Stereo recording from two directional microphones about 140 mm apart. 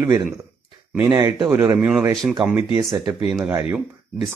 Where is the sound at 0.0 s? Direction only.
20° right (ahead or behind).